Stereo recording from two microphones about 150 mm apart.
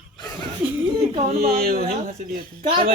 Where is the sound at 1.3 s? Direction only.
75° right (ahead or behind).